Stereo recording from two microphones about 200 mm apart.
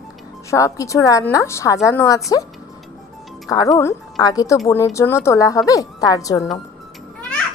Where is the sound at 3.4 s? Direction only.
15° left (ahead or behind).